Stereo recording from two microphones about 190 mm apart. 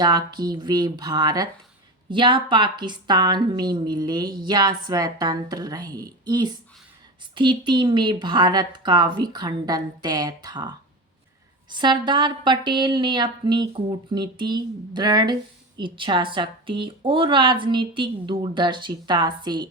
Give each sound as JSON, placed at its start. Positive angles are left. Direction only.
{"t": 0.0, "sound": "a woman's voice", "side_deg": -20}
{"t": 11.7, "sound": "a woman's voice", "side_deg": -25}